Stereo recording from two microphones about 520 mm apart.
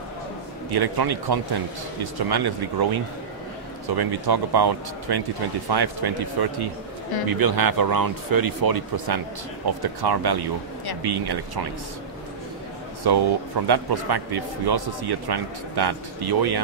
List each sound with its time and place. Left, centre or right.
0.7 s a man's voice: right
13.0 s a man's voice: right